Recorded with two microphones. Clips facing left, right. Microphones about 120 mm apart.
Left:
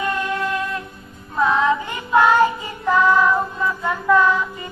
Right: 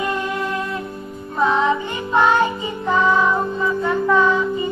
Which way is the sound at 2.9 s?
20° right (ahead or behind).